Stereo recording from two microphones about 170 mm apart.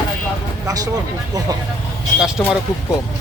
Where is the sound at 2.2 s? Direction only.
5° right (ahead or behind).